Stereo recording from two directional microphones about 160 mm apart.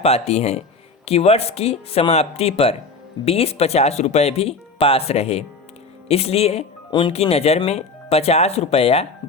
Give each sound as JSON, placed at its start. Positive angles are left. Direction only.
{"t": 0.0, "sound": "speech", "side_deg": 40}